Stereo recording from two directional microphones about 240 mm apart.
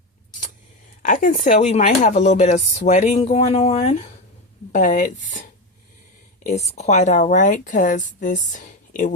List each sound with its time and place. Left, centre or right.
1.0 s a woman's voice: left
6.7 s a woman's voice: left